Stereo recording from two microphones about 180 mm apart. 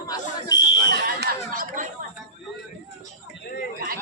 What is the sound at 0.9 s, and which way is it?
Speech, 65° right (ahead or behind).